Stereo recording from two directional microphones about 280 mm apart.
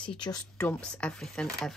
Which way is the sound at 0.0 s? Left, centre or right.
Centre.